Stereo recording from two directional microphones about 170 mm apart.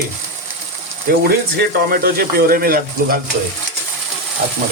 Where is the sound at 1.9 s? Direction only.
60° right (ahead or behind).